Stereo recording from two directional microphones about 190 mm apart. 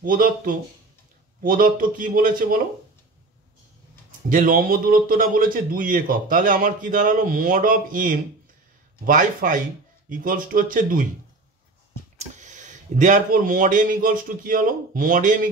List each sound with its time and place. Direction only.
0.0 s a man's voice: 45° right (ahead or behind)
4.3 s a man's voice: 45° right (ahead or behind)
12.2 s speech: 40° right (ahead or behind)